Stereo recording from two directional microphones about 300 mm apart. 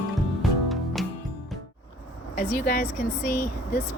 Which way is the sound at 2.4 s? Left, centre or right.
Left.